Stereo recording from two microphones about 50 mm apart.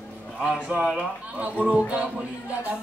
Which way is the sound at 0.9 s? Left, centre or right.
Right.